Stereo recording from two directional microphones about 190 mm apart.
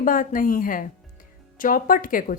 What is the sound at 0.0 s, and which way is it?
Speech, 45° left (ahead or behind).